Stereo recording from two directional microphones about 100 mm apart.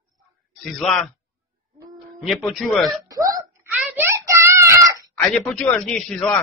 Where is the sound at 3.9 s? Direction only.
25° right (ahead or behind).